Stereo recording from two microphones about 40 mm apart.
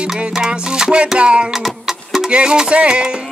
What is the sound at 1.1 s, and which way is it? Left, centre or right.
Music, right.